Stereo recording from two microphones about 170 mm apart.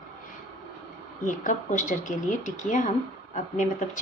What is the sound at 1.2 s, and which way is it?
Speech, 50° left (ahead or behind).